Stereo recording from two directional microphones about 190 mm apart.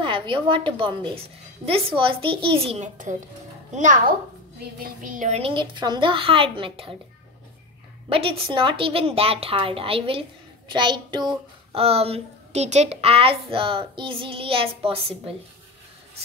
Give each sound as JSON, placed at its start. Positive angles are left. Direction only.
{"t": 0.0, "sound": "a woman's voice", "side_deg": -25}
{"t": 5.0, "sound": "a child's voice", "side_deg": -40}
{"t": 8.1, "sound": "a child's voice", "side_deg": -30}